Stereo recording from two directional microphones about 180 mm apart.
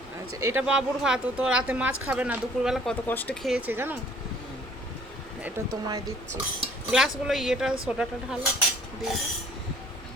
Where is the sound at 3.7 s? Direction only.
10° right (ahead or behind).